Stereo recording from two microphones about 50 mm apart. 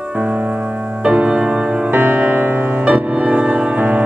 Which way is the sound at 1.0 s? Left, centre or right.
Centre.